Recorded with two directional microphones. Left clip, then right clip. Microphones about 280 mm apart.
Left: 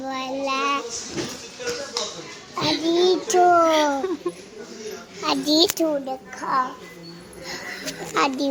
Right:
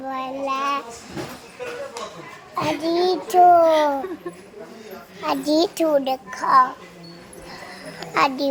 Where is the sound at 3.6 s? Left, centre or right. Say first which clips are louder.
Right 2 dB; centre.